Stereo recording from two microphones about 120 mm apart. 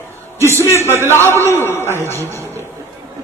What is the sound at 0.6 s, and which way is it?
A man's voice, 25° left (ahead or behind).